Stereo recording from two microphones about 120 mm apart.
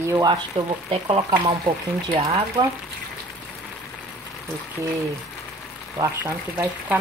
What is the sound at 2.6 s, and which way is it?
Speech, 40° right (ahead or behind).